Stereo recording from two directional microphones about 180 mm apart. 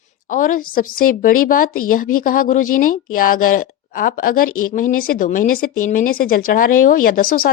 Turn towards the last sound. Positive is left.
turn(degrees=55)  # may be behind; listen again after turning